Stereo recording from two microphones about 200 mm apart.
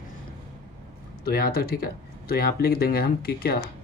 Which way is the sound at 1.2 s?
50° left (ahead or behind).